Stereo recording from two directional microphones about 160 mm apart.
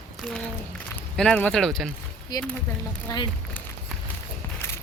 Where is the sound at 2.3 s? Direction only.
25° left (ahead or behind).